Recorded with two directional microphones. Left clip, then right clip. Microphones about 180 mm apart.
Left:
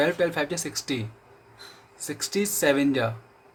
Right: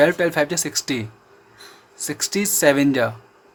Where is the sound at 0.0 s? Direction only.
35° right (ahead or behind).